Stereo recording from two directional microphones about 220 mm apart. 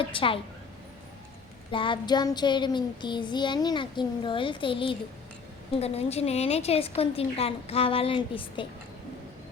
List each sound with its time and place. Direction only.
0.0 s child singing: 25° left (ahead or behind)
1.7 s child singing: 20° left (ahead or behind)